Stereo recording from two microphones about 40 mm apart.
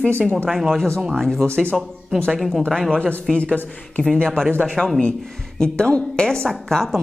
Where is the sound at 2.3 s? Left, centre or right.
Centre.